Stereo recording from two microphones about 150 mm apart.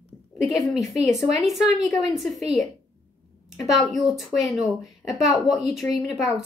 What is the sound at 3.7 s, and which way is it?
A woman's voice, centre (ahead or behind).